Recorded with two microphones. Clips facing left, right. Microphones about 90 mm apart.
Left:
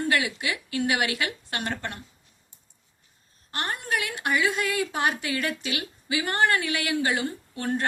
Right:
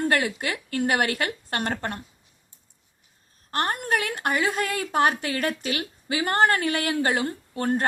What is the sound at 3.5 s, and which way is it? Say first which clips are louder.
A woman's voice: right 4 dB; 50° right (ahead or behind).